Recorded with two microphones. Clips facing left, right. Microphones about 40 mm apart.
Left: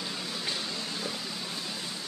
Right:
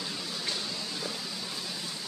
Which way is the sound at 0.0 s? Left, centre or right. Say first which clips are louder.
Left 1 dB; centre.